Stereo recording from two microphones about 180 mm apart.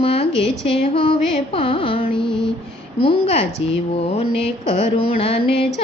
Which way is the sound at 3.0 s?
35° left (ahead or behind).